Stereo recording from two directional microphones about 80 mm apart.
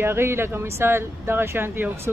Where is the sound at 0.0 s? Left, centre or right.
Right.